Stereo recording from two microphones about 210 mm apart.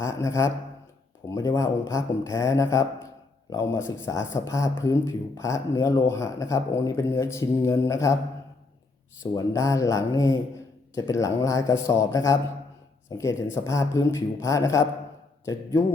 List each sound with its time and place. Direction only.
0.0 s speech: 15° left (ahead or behind)
9.3 s speech: 15° left (ahead or behind)